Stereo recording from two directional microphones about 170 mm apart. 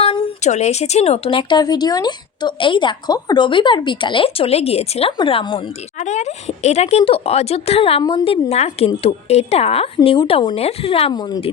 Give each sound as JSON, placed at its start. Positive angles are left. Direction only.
{"t": 0.0, "sound": "speech", "side_deg": 40}
{"t": 6.0, "sound": "speech", "side_deg": 45}